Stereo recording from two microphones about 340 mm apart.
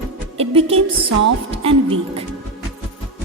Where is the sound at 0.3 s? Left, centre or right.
Centre.